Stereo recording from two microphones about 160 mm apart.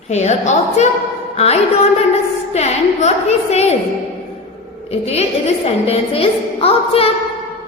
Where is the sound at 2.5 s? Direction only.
45° left (ahead or behind).